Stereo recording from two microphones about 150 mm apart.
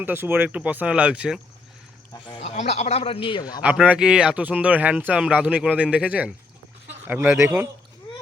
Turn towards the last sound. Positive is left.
turn(degrees=-15)  # may be behind; listen again after turning